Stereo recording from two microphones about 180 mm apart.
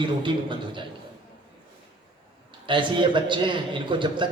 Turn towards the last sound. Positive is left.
turn(degrees=-25)  # may be behind; listen again after turning